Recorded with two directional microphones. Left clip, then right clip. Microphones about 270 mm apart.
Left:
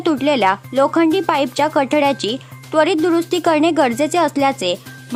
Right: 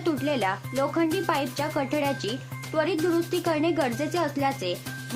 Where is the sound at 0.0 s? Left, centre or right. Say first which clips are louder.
Left 11 dB; left.